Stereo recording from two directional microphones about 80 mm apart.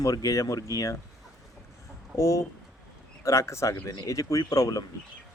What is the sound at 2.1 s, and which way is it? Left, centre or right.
Speech, left.